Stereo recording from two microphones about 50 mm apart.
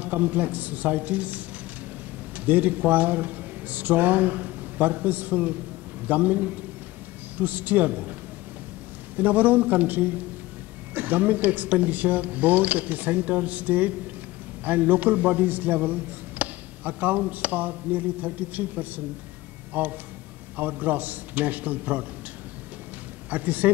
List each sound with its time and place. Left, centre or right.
0.0 s a man's voice: right
9.1 s a man's voice: right
23.3 s a man's voice: right